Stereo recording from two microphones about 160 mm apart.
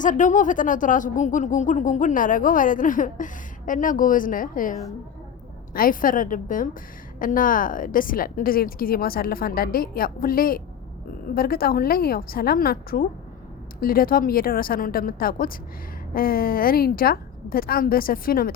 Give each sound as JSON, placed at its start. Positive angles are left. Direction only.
{"t": 0.0, "sound": "a woman's voice", "side_deg": 55}